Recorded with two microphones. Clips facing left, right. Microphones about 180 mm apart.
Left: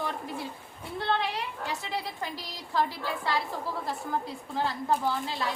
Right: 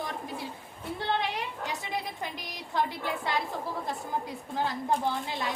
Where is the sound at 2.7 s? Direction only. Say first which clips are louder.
Left 1 dB; 20° right (ahead or behind).